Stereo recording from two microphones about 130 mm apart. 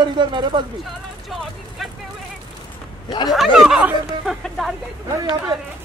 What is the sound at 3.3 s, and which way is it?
Speech, centre (ahead or behind).